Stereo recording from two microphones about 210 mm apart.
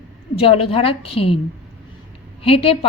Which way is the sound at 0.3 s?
25° left (ahead or behind).